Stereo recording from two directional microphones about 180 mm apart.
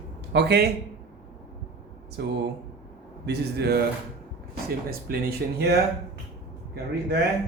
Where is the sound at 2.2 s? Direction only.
65° right (ahead or behind).